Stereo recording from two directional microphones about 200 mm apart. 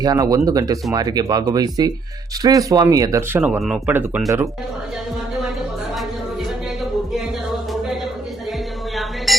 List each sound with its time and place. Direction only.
0.0 s speech: 20° right (ahead or behind)